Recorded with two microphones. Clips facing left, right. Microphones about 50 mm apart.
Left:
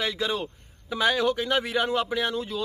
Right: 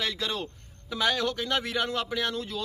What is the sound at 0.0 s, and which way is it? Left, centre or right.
A man's voice, centre.